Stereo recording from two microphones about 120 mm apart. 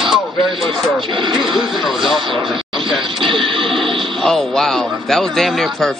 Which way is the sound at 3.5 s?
45° right (ahead or behind).